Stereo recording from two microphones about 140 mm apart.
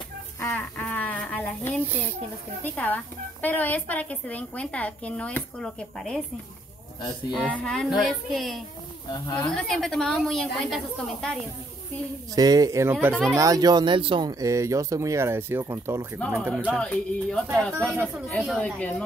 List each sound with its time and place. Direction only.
0.4 s a sound: 15° left (ahead or behind)
2.6 s speech: 10° left (ahead or behind)
7.0 s speech: 30° left (ahead or behind)
7.5 s a woman's voice: 5° left (ahead or behind)
12.4 s speech: 25° right (ahead or behind)
13.4 s speech: 25° right (ahead or behind)
14.4 s speech: 20° right (ahead or behind)
16.7 s a woman's voice: 5° left (ahead or behind)